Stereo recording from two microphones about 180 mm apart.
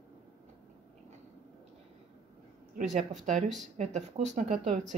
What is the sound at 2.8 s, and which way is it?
Speech, 40° right (ahead or behind).